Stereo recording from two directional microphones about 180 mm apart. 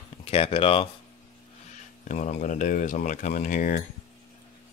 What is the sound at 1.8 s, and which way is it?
Speech, 45° left (ahead or behind).